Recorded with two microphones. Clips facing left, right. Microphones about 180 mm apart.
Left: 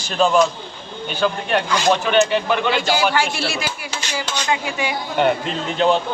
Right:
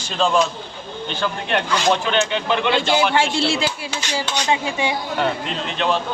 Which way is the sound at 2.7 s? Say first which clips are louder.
Right 3 dB; 25° right (ahead or behind).